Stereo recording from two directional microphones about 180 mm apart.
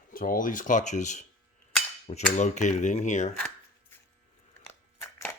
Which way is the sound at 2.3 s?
40° left (ahead or behind).